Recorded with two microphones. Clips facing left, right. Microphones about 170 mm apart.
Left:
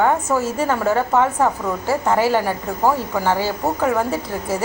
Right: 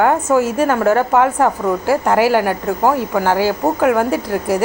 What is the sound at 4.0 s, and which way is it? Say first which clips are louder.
Speech: right 5 dB; 70° right (ahead or behind).